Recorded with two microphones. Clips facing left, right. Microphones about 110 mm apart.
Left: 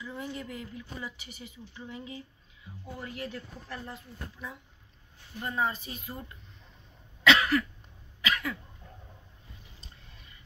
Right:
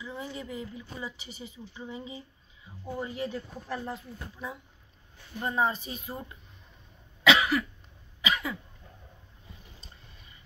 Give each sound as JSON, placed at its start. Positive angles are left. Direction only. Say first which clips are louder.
{"t": 0.0, "sound": "speech", "louder": "even", "side_deg": -10}
{"t": 7.2, "sound": "cough", "louder": "even", "side_deg": -10}